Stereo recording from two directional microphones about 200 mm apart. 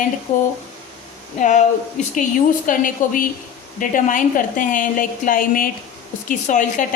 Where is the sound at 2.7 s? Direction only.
40° left (ahead or behind).